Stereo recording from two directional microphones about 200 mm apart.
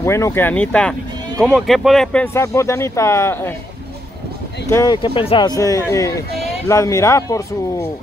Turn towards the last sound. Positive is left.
turn(degrees=15)  # may be behind; listen again after turning